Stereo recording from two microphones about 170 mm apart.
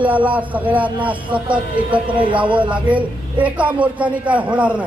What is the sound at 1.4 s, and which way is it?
Speech, 30° right (ahead or behind).